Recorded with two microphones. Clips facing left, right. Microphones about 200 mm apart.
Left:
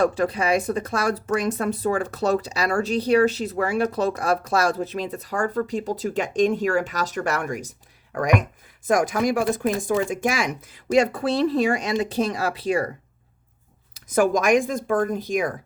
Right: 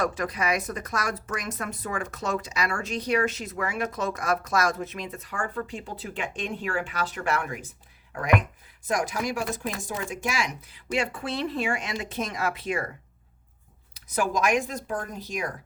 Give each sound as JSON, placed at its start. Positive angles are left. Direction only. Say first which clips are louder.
{"t": 0.0, "sound": "speech", "louder": "left 6 dB", "side_deg": 30}
{"t": 13.9, "sound": "speech", "louder": "left 7 dB", "side_deg": 50}